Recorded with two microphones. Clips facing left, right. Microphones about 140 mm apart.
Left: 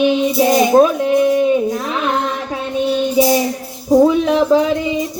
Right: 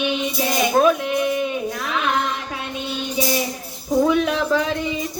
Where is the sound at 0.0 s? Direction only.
35° left (ahead or behind).